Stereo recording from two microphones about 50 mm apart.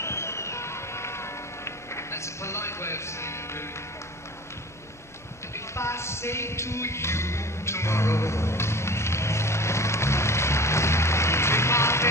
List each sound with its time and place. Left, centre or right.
0.0 s vehicle: left
5.8 s music: left